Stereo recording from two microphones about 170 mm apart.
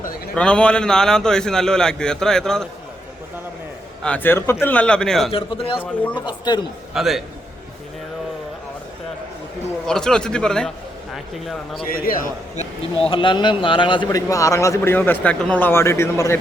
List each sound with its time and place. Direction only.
0.3 s a man's voice: 5° left (ahead or behind)
4.0 s a man's voice: 10° left (ahead or behind)
5.3 s speech: 35° left (ahead or behind)
6.9 s a man's voice: centre (ahead or behind)
9.8 s a man's voice: 5° left (ahead or behind)
11.9 s a man's voice: 55° left (ahead or behind)
13.0 s speech: 30° left (ahead or behind); by 16.4 s 15° left (ahead or behind)